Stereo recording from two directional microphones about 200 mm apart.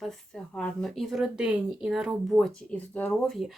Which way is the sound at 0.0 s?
Centre (ahead or behind).